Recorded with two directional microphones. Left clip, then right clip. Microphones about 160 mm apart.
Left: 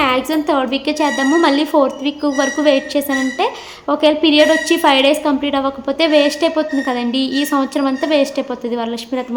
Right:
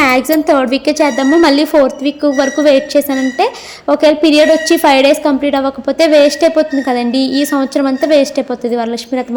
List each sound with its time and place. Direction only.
0.0 s speech: 30° right (ahead or behind)